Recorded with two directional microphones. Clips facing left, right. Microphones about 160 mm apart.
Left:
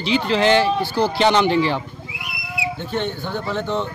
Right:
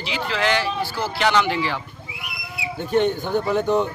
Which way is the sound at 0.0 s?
25° left (ahead or behind).